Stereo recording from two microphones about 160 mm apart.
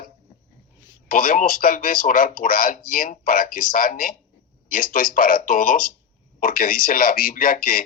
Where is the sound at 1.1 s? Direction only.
60° left (ahead or behind).